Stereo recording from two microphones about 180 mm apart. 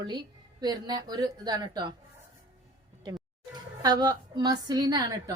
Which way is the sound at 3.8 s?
20° right (ahead or behind).